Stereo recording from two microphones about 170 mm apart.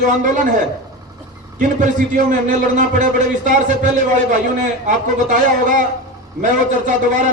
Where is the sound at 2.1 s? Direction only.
50° right (ahead or behind).